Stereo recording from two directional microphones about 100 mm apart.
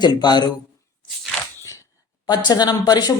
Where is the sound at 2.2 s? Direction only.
40° left (ahead or behind).